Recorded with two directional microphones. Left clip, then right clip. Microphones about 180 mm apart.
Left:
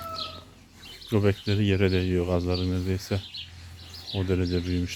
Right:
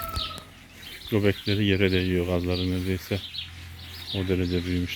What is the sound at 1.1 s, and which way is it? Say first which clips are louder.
Speech: right 1 dB; 5° left (ahead or behind).